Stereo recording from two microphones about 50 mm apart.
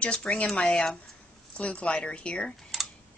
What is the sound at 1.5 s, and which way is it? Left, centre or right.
Speech, left.